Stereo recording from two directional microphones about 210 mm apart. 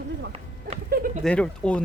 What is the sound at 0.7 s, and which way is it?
Goat, 45° right (ahead or behind).